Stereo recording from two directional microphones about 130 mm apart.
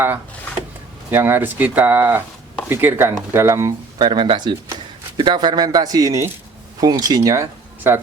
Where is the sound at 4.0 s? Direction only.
35° right (ahead or behind).